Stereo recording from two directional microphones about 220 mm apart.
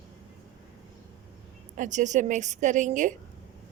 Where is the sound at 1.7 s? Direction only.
35° right (ahead or behind).